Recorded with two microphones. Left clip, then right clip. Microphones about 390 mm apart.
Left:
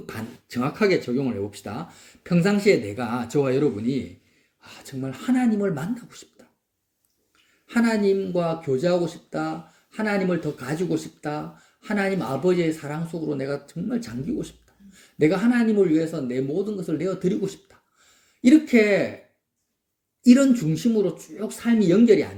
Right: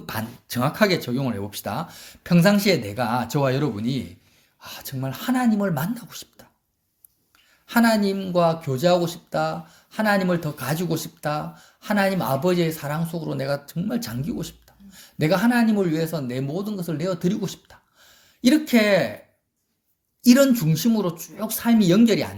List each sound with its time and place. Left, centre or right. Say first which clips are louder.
0.0 s speech: right 5 dB; right
7.7 s speech: right 1 dB; right
20.2 s speech: right 1 dB; right